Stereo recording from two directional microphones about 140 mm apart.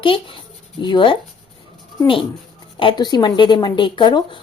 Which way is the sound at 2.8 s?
35° left (ahead or behind).